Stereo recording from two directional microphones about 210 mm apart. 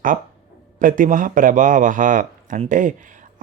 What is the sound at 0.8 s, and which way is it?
A man's voice, 40° right (ahead or behind).